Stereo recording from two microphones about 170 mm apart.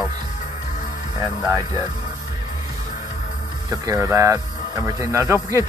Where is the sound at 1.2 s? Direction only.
20° right (ahead or behind).